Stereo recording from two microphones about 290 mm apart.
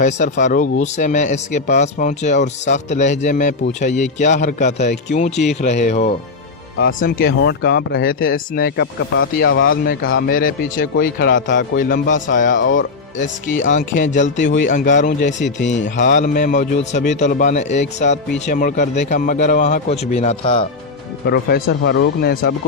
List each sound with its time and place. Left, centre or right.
0.0 s speech: left
9.6 s speech: left
13.7 s speech: left
14.4 s speech: left
14.7 s speech: left
21.2 s speech: left